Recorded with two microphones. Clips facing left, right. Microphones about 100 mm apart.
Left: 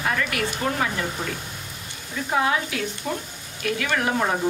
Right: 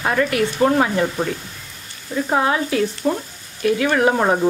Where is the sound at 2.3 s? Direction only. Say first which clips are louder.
Right 4 dB; 35° right (ahead or behind).